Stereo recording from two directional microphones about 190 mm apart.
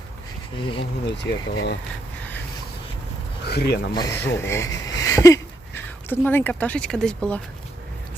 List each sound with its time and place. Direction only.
0.8 s speech: 65° left (ahead or behind)
3.4 s speech: 60° left (ahead or behind)
3.9 s speech: 20° left (ahead or behind)